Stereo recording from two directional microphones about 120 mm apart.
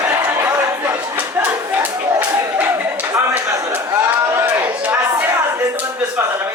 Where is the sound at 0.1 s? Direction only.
20° right (ahead or behind).